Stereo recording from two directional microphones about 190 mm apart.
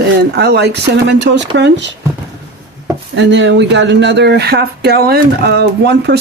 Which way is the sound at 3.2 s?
70° right (ahead or behind).